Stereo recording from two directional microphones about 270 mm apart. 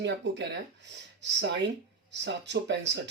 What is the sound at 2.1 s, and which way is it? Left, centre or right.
Speech, right.